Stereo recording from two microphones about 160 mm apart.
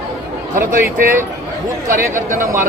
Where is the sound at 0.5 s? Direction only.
55° right (ahead or behind).